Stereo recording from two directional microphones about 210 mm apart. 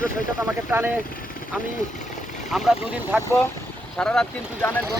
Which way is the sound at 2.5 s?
Centre (ahead or behind).